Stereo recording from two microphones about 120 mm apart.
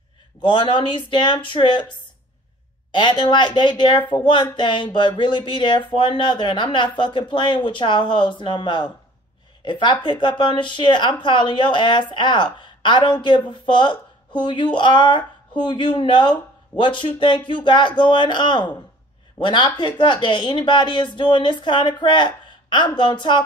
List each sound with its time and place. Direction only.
0.4 s a woman's voice: 40° left (ahead or behind)